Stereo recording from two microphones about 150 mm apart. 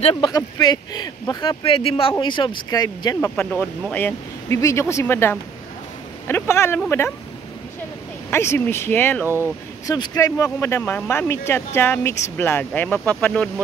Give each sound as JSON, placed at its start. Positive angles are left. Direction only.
{"t": 0.0, "sound": "speech", "side_deg": 30}
{"t": 3.3, "sound": "speech", "side_deg": 10}
{"t": 8.3, "sound": "speech", "side_deg": 15}
{"t": 9.2, "sound": "speech", "side_deg": -15}
{"t": 9.8, "sound": "speech", "side_deg": 25}